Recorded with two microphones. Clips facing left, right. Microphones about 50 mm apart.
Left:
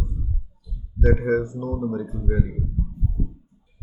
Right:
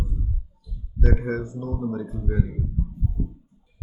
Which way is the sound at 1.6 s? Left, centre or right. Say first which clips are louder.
Left 2 dB; left.